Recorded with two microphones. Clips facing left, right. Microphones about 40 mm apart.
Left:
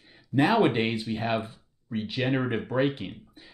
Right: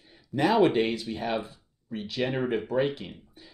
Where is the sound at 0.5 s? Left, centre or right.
Centre.